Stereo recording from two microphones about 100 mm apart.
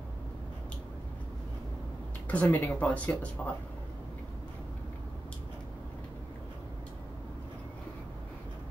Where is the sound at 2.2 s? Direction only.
15° left (ahead or behind).